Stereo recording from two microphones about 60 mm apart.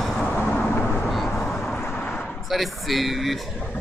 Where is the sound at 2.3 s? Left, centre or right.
Centre.